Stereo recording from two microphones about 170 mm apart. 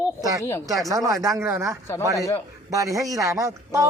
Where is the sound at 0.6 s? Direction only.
20° right (ahead or behind).